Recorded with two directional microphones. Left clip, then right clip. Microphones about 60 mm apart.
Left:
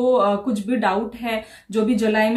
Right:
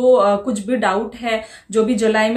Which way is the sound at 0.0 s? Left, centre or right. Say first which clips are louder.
Right 5 dB; right.